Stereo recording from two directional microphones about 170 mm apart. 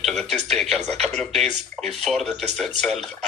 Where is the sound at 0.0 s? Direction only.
Centre (ahead or behind).